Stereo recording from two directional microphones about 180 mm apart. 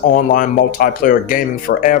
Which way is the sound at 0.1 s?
50° left (ahead or behind).